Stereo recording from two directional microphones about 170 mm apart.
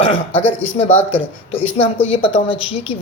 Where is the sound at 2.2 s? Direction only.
30° left (ahead or behind).